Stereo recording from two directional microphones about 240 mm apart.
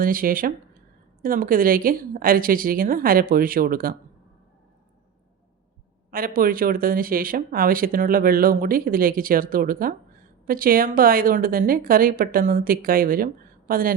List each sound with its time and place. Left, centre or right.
0.0 s speech: right
6.1 s speech: right